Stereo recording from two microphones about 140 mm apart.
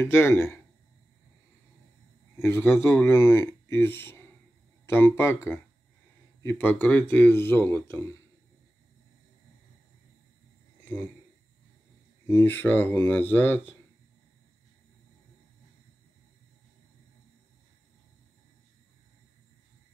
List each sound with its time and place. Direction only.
0.0 s speech: 20° left (ahead or behind)
2.3 s speech: 15° left (ahead or behind)
12.3 s speech: 15° left (ahead or behind)